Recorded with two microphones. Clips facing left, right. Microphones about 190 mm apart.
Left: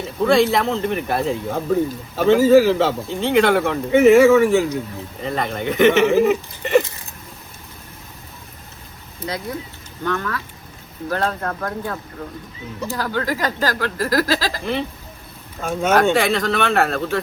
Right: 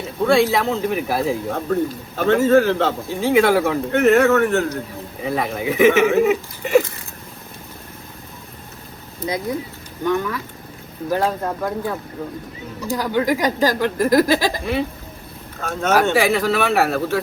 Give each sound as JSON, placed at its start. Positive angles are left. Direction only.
{"t": 0.2, "sound": "speech", "side_deg": 0}
{"t": 9.2, "sound": "speech", "side_deg": -15}
{"t": 14.6, "sound": "speech", "side_deg": 0}
{"t": 16.1, "sound": "speech", "side_deg": -5}